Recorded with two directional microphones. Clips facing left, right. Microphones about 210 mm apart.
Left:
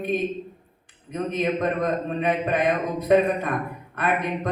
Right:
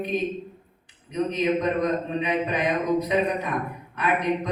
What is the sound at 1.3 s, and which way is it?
A man's voice, 55° left (ahead or behind).